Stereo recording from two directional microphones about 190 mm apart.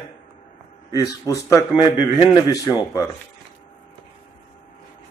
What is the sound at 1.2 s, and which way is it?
Speech, 15° left (ahead or behind).